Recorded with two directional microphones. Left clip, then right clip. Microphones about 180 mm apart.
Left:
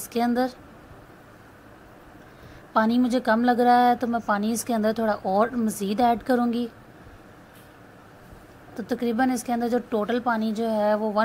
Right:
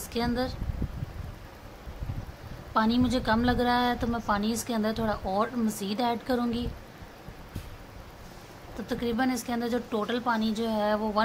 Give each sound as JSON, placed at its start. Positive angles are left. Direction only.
{"t": 0.1, "sound": "speech", "side_deg": 30}
{"t": 2.7, "sound": "a woman's voice", "side_deg": 30}
{"t": 8.8, "sound": "a woman's voice", "side_deg": 25}